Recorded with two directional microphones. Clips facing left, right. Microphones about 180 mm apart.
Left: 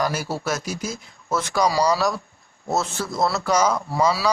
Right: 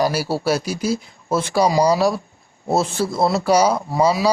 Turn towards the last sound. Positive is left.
turn(degrees=-20)  # may be behind; listen again after turning